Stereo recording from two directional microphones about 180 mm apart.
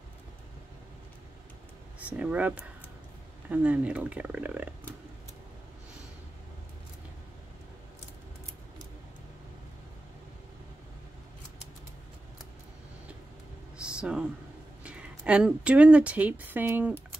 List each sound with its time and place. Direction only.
2.0 s speech: 10° right (ahead or behind)
13.7 s a sound: 5° right (ahead or behind)
14.8 s speech: 5° right (ahead or behind)